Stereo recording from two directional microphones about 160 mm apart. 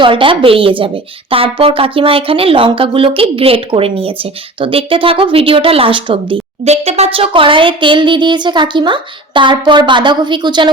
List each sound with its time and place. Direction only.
0.0 s speech: 35° right (ahead or behind)